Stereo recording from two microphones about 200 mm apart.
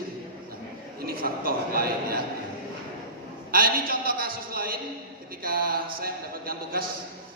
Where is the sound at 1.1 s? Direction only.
45° right (ahead or behind).